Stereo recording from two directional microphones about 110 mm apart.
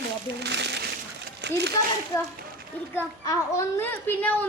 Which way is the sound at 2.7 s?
15° left (ahead or behind).